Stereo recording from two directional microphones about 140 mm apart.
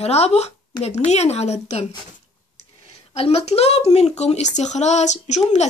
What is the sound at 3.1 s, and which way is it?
Speech, 45° left (ahead or behind).